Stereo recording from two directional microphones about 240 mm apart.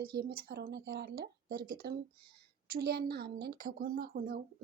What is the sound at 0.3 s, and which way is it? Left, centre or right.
Speech, right.